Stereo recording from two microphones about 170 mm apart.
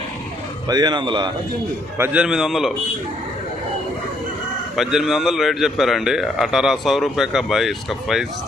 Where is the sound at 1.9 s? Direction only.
10° right (ahead or behind).